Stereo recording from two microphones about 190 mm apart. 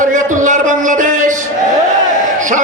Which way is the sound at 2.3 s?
40° right (ahead or behind).